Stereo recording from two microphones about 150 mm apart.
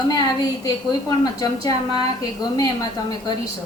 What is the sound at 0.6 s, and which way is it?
A woman's voice, 25° left (ahead or behind).